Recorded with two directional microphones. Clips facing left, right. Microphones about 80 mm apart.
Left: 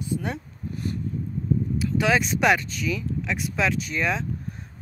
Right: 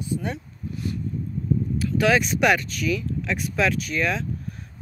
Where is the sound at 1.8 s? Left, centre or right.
Left.